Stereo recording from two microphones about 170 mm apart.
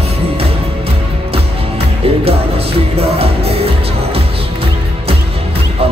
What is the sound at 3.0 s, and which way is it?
Music, 35° right (ahead or behind).